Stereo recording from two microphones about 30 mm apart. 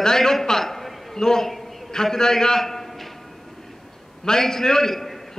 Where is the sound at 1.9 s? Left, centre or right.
Centre.